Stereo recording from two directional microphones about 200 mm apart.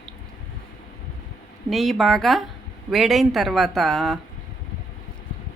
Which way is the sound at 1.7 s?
Centre (ahead or behind).